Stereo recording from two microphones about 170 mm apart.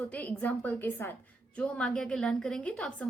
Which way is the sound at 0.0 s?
10° left (ahead or behind).